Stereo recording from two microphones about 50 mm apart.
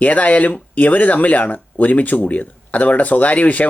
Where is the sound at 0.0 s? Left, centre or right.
Left.